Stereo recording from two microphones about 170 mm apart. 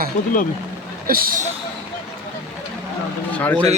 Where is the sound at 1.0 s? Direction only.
60° right (ahead or behind).